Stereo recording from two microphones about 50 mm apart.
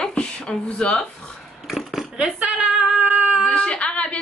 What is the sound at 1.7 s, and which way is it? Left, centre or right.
Cutlery, centre.